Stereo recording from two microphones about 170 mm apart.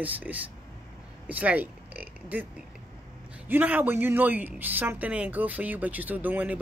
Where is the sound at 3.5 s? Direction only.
10° right (ahead or behind).